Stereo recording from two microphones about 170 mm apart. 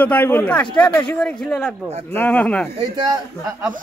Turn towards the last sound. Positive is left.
turn(degrees=-25)  # may be behind; listen again after turning